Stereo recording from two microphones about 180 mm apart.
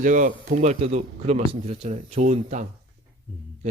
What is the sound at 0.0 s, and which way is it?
Speech, 45° right (ahead or behind).